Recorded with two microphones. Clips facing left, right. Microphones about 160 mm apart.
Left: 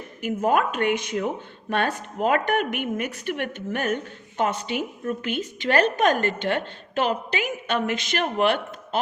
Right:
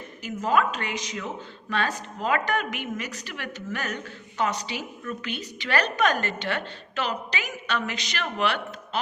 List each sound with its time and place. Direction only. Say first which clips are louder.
0.2 s a woman's voice: left 2 dB; 55° left (ahead or behind)